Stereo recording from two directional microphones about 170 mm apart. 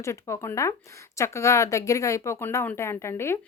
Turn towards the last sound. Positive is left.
turn(degrees=15)  # may be behind; listen again after turning